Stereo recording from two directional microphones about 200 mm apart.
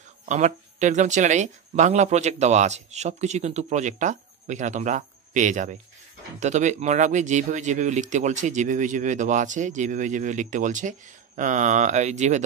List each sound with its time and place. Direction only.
0.2 s speech: 35° right (ahead or behind)